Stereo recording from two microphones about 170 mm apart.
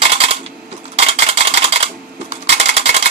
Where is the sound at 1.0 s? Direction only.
35° right (ahead or behind).